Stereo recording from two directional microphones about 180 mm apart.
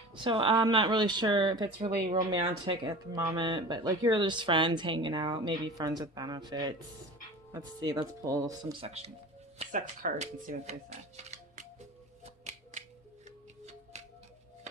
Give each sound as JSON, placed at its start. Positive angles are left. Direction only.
{"t": 0.2, "sound": "speech", "side_deg": -30}
{"t": 8.8, "sound": "speech", "side_deg": -35}
{"t": 9.6, "sound": "speech", "side_deg": -45}
{"t": 11.2, "sound": "music", "side_deg": -40}